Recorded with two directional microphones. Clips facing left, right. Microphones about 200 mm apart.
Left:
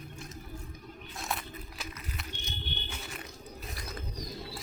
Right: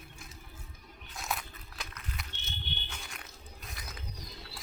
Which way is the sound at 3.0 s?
5° left (ahead or behind).